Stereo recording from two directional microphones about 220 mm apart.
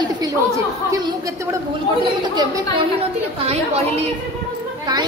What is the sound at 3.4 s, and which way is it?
Speech, 30° right (ahead or behind).